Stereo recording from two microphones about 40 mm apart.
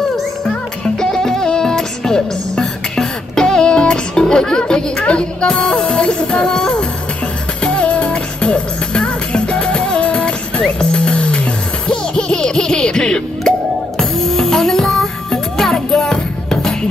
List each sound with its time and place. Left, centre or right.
0.9 s music: centre
13.9 s music: centre